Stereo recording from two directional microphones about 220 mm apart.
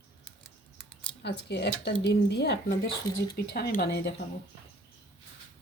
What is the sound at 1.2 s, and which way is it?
Speech, 50° left (ahead or behind).